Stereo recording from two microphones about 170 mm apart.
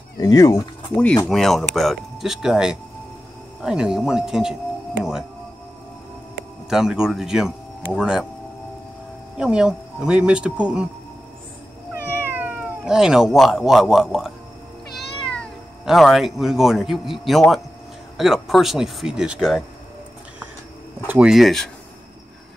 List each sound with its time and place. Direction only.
0.2 s speech: 20° left (ahead or behind)
1.0 s speech: 5° left (ahead or behind)
6.7 s speech: 5° right (ahead or behind)
9.4 s speech: 5° right (ahead or behind)
11.9 s cat: 10° right (ahead or behind)
15.3 s speech: centre (ahead or behind)
21.1 s speech: 5° right (ahead or behind)